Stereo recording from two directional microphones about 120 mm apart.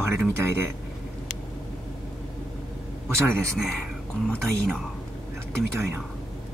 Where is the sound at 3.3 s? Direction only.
5° left (ahead or behind).